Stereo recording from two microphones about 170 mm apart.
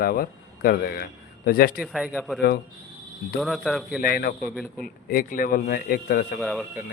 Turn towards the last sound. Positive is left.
turn(degrees=0)  # may be behind; listen again after turning